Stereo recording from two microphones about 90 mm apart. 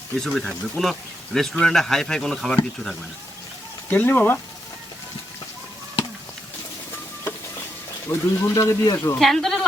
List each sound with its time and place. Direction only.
0.2 s speech: 5° left (ahead or behind)
3.8 s speech: 20° left (ahead or behind)
8.0 s speech: 30° left (ahead or behind)
9.1 s speech: 5° left (ahead or behind)